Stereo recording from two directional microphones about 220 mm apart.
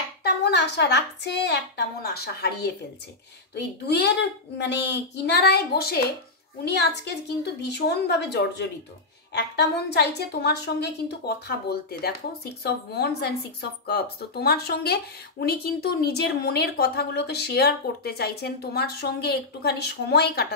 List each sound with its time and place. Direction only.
0.4 s a woman's voice: 50° left (ahead or behind)
3.8 s a woman's voice: 50° left (ahead or behind)